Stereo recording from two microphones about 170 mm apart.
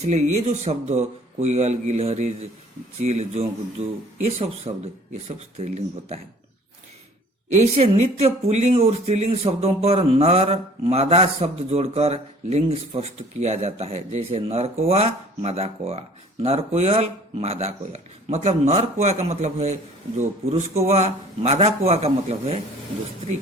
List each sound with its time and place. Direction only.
0.0 s speech: 40° right (ahead or behind)
7.5 s speech: 40° right (ahead or behind)